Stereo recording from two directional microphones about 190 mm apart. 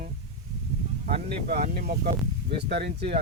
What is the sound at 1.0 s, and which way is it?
Speech, 40° right (ahead or behind).